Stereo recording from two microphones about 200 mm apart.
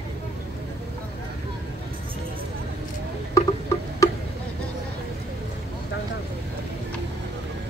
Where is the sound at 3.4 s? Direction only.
15° left (ahead or behind).